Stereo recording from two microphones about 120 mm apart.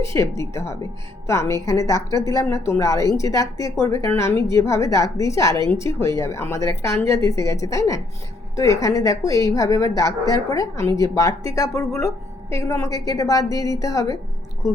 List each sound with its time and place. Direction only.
0.0 s speech: 25° left (ahead or behind)